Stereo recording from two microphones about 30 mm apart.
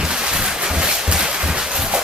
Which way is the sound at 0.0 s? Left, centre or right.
Right.